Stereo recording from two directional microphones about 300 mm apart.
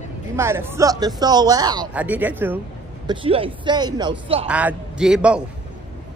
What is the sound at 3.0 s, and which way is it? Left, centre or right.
A child's voice, centre.